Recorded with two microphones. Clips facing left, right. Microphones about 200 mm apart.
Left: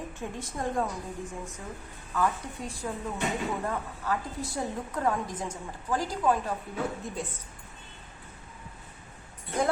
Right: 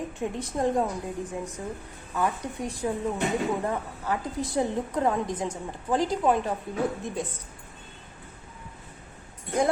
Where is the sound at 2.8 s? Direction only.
20° right (ahead or behind).